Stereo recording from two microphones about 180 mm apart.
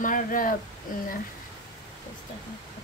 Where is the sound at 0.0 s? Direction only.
50° left (ahead or behind).